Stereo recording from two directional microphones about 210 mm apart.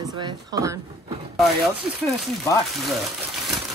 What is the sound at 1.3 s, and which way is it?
Speech, centre (ahead or behind).